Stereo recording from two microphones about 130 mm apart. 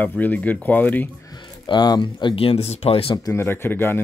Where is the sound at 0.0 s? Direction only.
15° left (ahead or behind).